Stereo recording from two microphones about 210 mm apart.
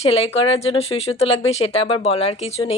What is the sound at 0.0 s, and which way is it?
A woman's voice, 30° left (ahead or behind).